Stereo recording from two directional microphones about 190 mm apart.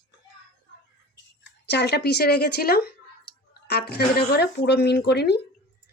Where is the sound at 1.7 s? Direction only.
60° left (ahead or behind).